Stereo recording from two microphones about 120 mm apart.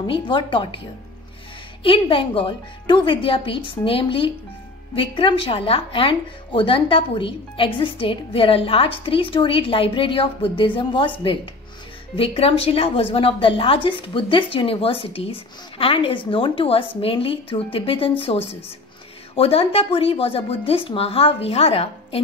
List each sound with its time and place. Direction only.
0.0 s a woman's voice: 45° left (ahead or behind)
1.8 s a woman's voice: 45° left (ahead or behind)